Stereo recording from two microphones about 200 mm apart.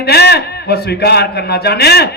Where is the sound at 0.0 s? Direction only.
55° left (ahead or behind).